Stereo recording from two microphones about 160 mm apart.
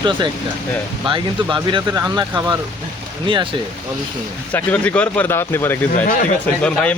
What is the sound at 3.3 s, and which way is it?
Speech, 30° right (ahead or behind).